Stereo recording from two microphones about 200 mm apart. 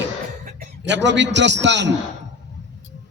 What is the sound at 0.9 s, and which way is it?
A man's voice, 60° right (ahead or behind).